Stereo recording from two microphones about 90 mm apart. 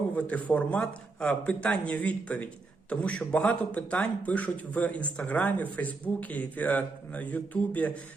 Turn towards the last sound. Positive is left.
turn(degrees=15)  # may be behind; listen again after turning